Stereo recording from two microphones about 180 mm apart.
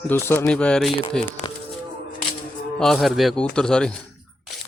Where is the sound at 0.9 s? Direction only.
30° left (ahead or behind).